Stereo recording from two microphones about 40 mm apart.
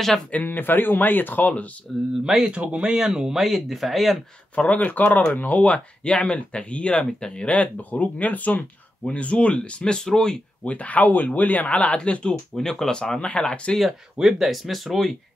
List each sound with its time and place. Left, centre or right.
0.5 s speech: left
1.9 s speech: centre
2.5 s speech: right
2.9 s speech: centre
4.6 s speech: left
7.1 s speech: centre
7.3 s speech: left
9.0 s speech: left; by 10.4 s centre
10.6 s speech: left
11.7 s speech: left
12.5 s speech: centre
13.0 s speech: centre
14.4 s speech: centre